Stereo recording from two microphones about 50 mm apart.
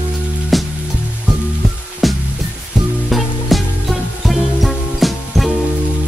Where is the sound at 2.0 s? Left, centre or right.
Centre.